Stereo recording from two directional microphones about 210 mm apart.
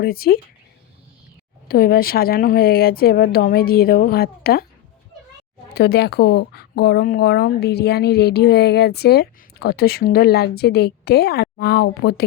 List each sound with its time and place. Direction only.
0.0 s speech: 45° left (ahead or behind)
1.6 s speech: 45° left (ahead or behind)
5.7 s speech: 50° left (ahead or behind)